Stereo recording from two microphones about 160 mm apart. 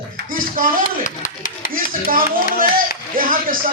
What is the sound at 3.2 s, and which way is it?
Speech, 60° right (ahead or behind).